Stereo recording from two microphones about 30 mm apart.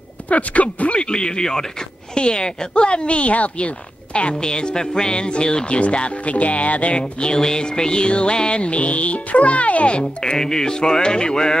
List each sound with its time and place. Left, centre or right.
0.3 s speech: left
1.0 s music: left
4.5 s music: left
5.8 s speech: left
7.3 s music: left
9.9 s music: left